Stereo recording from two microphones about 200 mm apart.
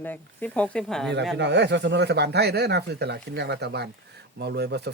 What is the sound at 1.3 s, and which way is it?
Speech, 60° right (ahead or behind).